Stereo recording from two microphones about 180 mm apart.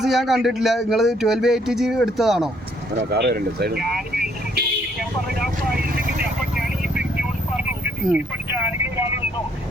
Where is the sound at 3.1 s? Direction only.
65° right (ahead or behind).